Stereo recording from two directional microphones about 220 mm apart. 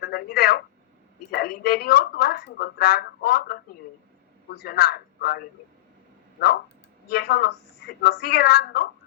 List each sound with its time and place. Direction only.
0.0 s telephone: 45° left (ahead or behind)
1.3 s speech: 45° left (ahead or behind)
4.6 s speech: 45° left (ahead or behind)
7.1 s speech: 45° left (ahead or behind)